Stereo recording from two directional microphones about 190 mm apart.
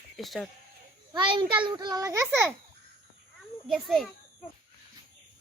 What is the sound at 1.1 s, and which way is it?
A child's voice, 25° right (ahead or behind).